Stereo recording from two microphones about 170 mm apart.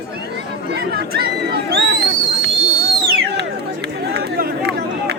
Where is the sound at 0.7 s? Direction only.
70° right (ahead or behind).